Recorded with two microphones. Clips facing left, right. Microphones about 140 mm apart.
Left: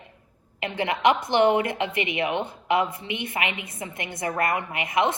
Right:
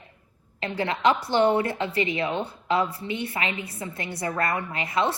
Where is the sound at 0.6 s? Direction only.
15° left (ahead or behind).